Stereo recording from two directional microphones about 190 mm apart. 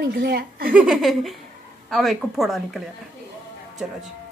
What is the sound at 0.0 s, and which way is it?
Speech, 55° right (ahead or behind).